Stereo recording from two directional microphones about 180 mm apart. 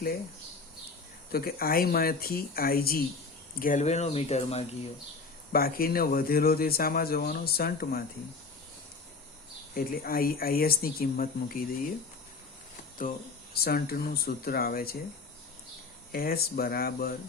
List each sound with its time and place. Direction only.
1.3 s speech: 55° left (ahead or behind)
3.6 s speech: 45° left (ahead or behind)
5.5 s speech: 55° left (ahead or behind)
9.7 s speech: 55° left (ahead or behind)
13.5 s speech: 60° left (ahead or behind)
16.1 s speech: 55° left (ahead or behind)